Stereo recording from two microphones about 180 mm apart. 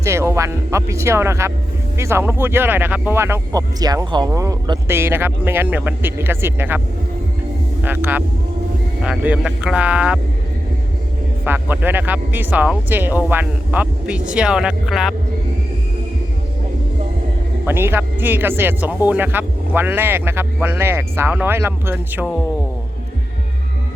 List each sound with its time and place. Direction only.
0.0 s speech: 15° right (ahead or behind)
11.4 s speech: 10° right (ahead or behind)
17.7 s speech: 10° right (ahead or behind)